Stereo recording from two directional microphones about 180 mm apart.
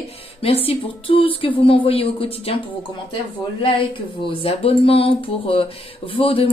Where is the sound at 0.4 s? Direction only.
30° left (ahead or behind).